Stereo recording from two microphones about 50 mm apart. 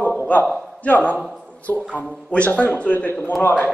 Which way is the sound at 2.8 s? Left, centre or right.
Left.